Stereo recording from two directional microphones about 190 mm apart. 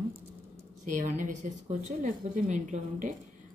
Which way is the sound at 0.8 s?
40° right (ahead or behind).